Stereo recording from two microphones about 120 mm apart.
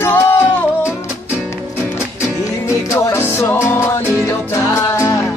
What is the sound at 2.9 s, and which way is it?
Music, 20° left (ahead or behind).